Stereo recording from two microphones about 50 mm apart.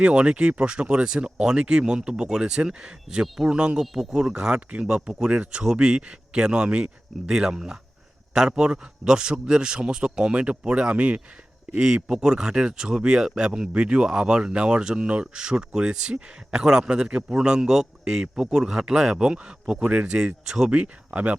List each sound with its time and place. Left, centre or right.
0.0 s a man's voice: right
12.0 s a man's voice: centre